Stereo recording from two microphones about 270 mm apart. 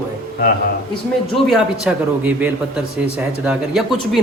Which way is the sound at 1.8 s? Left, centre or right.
Centre.